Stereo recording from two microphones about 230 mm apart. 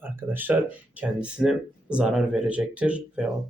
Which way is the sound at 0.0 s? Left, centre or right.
Centre.